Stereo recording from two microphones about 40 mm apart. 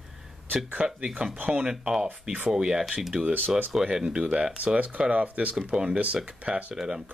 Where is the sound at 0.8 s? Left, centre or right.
Right.